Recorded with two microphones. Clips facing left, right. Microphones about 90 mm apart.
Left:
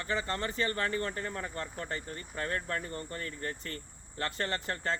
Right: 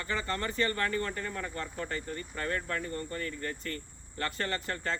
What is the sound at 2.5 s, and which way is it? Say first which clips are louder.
Speech: right 2 dB; 25° left (ahead or behind).